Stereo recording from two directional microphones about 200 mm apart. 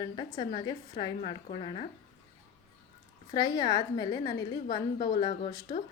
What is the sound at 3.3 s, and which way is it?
A woman's voice, 20° left (ahead or behind).